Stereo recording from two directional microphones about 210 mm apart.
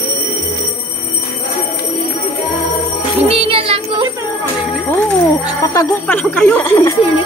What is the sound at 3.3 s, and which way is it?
Music, 25° right (ahead or behind).